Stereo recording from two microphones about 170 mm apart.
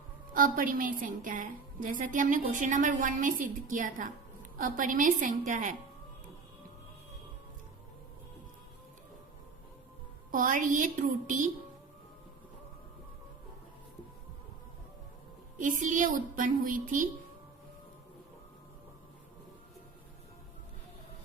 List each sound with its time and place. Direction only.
0.3 s a woman's voice: 55° right (ahead or behind)
10.3 s a woman's voice: 50° right (ahead or behind)
15.5 s a woman's voice: 50° right (ahead or behind)